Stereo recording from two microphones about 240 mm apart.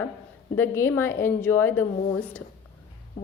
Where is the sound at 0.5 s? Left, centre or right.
Centre.